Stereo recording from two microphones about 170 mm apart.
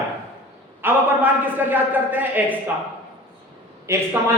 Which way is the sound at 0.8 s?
10° right (ahead or behind).